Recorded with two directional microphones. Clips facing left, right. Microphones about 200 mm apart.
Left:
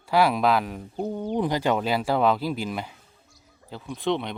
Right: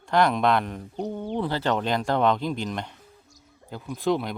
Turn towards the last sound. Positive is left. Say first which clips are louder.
# right 1 dB
turn(degrees=0)  # may be behind; listen again after turning